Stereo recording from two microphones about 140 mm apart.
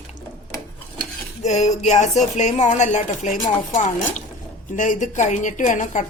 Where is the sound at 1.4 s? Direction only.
55° left (ahead or behind).